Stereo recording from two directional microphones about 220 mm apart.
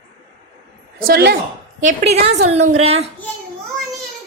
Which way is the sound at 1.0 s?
45° right (ahead or behind).